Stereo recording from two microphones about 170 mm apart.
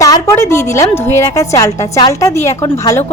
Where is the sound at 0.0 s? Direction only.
20° left (ahead or behind).